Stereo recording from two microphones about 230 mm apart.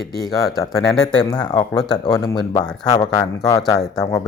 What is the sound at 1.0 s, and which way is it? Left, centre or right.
A man's voice, centre.